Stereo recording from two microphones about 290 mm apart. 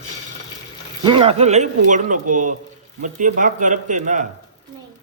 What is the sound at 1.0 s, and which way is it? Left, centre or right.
Speech, centre.